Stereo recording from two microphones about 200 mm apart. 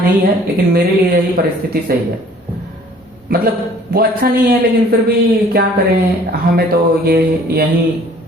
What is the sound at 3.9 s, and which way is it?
Speech, 50° right (ahead or behind).